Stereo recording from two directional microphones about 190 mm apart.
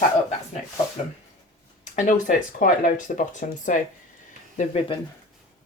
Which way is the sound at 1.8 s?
40° left (ahead or behind).